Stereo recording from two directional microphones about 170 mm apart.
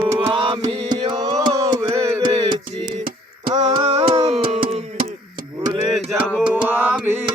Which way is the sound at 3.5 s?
40° right (ahead or behind).